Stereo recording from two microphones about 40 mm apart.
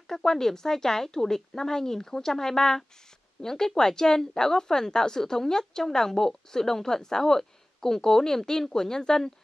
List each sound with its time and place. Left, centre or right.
0.1 s speech: centre